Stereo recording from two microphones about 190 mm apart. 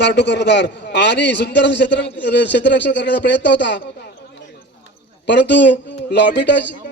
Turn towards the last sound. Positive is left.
turn(degrees=65)  # may be behind; listen again after turning